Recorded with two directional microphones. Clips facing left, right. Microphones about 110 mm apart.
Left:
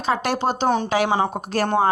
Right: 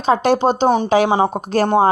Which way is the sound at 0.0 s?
25° right (ahead or behind).